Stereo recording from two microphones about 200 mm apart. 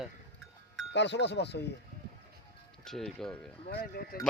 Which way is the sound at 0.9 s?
60° left (ahead or behind).